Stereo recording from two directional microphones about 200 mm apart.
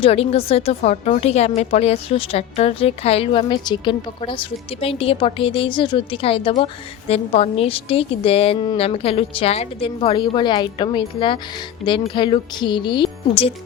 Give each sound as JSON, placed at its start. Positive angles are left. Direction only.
{"t": 0.0, "sound": "a woman's voice", "side_deg": 30}